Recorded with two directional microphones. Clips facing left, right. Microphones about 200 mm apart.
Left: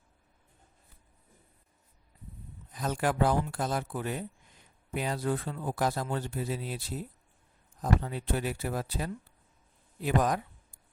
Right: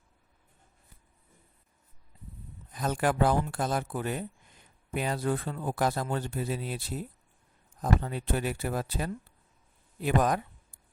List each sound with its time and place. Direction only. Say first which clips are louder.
2.7 s speech: right 2 dB; 55° right (ahead or behind)